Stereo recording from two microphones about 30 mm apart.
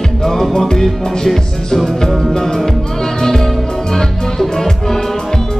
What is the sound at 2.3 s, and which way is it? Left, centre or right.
Music, centre.